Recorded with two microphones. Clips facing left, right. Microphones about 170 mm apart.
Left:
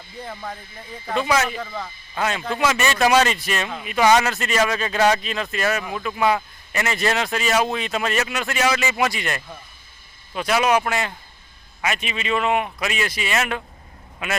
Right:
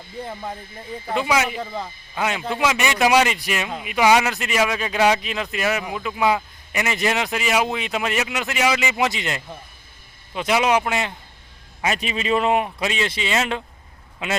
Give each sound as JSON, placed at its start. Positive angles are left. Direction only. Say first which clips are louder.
{"t": 0.3, "sound": "a man's voice", "louder": "right 2 dB", "side_deg": -20}
{"t": 11.8, "sound": "a man's voice", "louder": "right 2 dB", "side_deg": -35}